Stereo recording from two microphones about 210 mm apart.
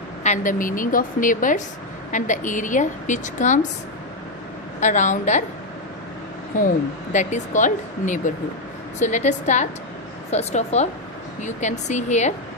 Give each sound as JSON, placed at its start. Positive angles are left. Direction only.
{"t": 0.2, "sound": "a woman's voice", "side_deg": 35}
{"t": 4.8, "sound": "a woman's voice", "side_deg": 35}
{"t": 6.6, "sound": "a woman's voice", "side_deg": 35}